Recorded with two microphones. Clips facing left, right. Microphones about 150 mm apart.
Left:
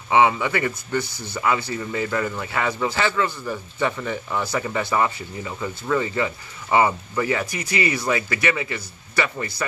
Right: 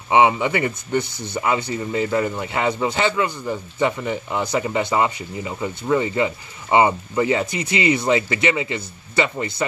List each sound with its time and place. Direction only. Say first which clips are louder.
0.1 s speech: right 2 dB; 20° right (ahead or behind)